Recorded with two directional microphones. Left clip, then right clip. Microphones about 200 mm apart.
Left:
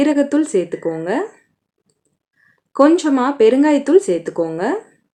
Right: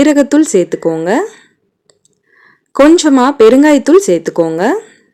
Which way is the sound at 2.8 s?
45° right (ahead or behind).